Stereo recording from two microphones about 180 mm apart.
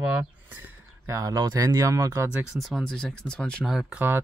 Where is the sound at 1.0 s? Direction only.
20° right (ahead or behind).